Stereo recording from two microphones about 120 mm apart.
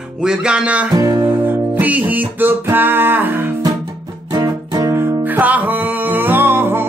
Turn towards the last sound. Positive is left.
turn(degrees=-20)  # may be behind; listen again after turning